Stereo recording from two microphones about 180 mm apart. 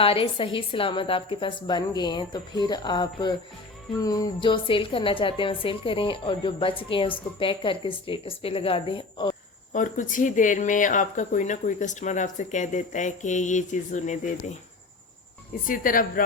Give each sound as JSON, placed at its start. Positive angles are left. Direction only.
{"t": 0.0, "sound": "a woman's voice", "side_deg": 30}
{"t": 9.7, "sound": "speech", "side_deg": 45}
{"t": 15.6, "sound": "speech", "side_deg": 50}